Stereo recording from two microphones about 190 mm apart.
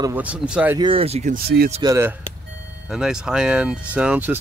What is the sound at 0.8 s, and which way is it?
Speech, 30° right (ahead or behind).